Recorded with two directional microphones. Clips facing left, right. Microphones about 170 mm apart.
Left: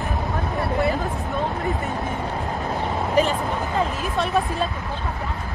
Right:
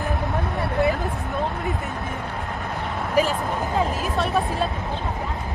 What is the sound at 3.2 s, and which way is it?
Speech, 5° right (ahead or behind).